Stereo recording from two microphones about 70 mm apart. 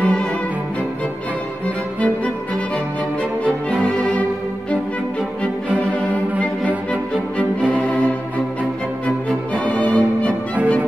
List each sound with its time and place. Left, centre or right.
0.0 s music: centre
3.8 s music: centre
5.8 s music: centre
7.7 s violin: centre
9.6 s music: centre